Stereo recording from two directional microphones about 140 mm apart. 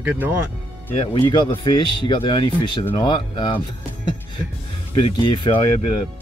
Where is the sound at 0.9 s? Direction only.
40° left (ahead or behind).